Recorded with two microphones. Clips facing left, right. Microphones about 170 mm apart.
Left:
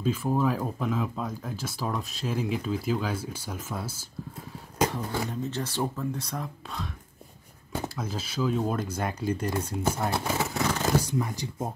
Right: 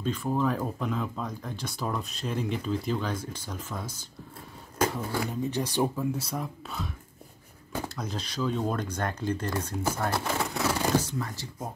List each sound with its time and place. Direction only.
0.0 s speech: 10° left (ahead or behind)
4.9 s speech: 5° right (ahead or behind)
7.9 s speech: 5° left (ahead or behind)
10.2 s vehicle: 5° left (ahead or behind)
11.0 s speech: 15° left (ahead or behind)